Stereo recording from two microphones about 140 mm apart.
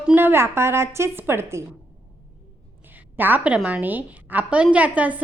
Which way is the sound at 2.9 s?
15° right (ahead or behind).